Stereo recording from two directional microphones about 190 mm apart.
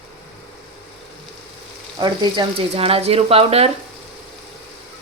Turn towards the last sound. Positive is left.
turn(degrees=-30)  # may be behind; listen again after turning